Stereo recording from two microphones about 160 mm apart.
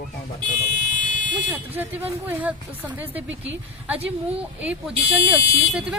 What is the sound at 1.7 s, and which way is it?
Speech, 10° right (ahead or behind).